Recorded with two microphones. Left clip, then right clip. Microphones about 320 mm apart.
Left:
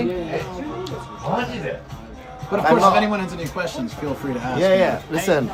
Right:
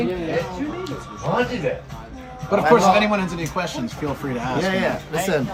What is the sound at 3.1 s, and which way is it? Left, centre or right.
Speech, right.